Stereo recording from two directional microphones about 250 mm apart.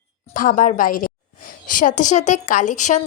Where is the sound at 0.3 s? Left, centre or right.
Left.